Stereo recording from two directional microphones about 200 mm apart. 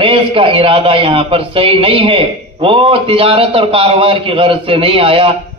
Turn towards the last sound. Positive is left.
turn(degrees=-25)  # may be behind; listen again after turning